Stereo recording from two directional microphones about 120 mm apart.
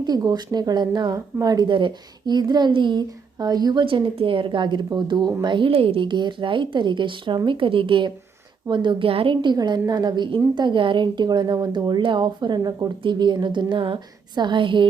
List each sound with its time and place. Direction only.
0.0 s speech: 35° right (ahead or behind)
3.8 s a woman's voice: 45° right (ahead or behind)